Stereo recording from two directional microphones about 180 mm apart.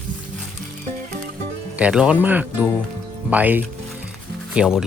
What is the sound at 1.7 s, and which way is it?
Speech, 5° right (ahead or behind).